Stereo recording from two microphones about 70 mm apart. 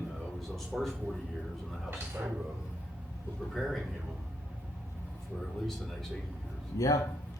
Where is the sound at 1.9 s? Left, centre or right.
Right.